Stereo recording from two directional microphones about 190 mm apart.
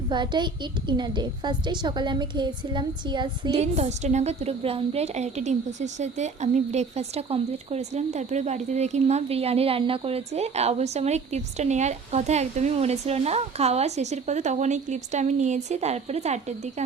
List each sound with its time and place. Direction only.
0.1 s a child's voice: 25° right (ahead or behind)
3.6 s a woman's voice: 35° right (ahead or behind)